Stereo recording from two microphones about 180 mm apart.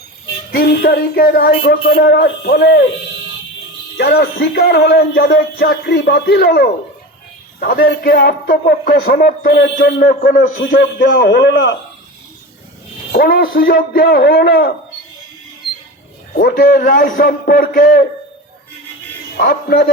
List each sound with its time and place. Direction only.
0.5 s speech: 55° left (ahead or behind)
2.0 s speech: 70° left (ahead or behind)
3.9 s speech: 60° left (ahead or behind)
9.7 s a man's voice: 50° left (ahead or behind); by 11.7 s 65° left (ahead or behind)
13.1 s speech: 60° left (ahead or behind)
13.6 s speech: 55° left (ahead or behind)
16.3 s a man's voice: 55° left (ahead or behind)
19.4 s speech: 55° left (ahead or behind)